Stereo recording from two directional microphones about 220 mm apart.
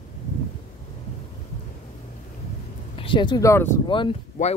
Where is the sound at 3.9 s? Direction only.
20° left (ahead or behind).